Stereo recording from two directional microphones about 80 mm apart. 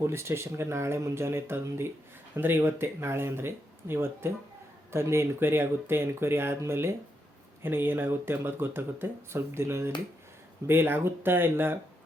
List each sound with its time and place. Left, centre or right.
0.0 s speech: right